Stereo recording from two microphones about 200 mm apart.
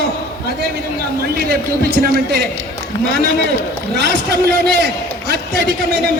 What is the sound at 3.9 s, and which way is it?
Speech, 55° right (ahead or behind).